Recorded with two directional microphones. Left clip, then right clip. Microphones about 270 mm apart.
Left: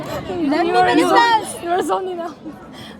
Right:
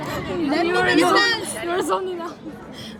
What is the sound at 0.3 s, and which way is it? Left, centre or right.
A child's voice, left.